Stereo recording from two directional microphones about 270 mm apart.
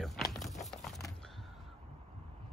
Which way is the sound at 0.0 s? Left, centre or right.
Centre.